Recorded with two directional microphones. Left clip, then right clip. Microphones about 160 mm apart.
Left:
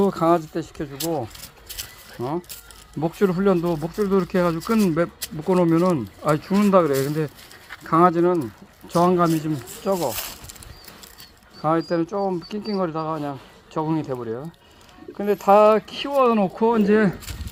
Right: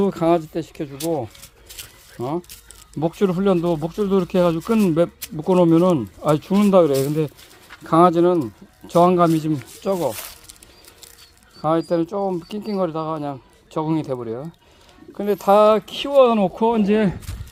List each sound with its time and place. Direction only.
0.0 s speech: 25° right (ahead or behind)
2.1 s speech: 20° right (ahead or behind)
5.5 s speech: 40° right (ahead or behind)
11.6 s speech: 15° right (ahead or behind)
12.1 s speech: 5° right (ahead or behind)
12.5 s speech: 20° right (ahead or behind)